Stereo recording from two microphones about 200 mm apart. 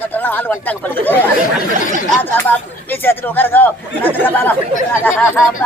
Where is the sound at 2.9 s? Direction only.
10° left (ahead or behind).